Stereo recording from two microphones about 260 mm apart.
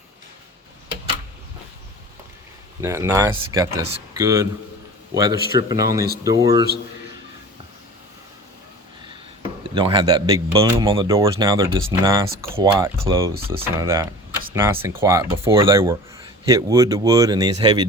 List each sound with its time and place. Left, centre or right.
2.8 s speech: centre
9.7 s speech: centre